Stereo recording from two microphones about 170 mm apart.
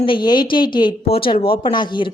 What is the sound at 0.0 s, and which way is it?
A woman's voice, 25° left (ahead or behind).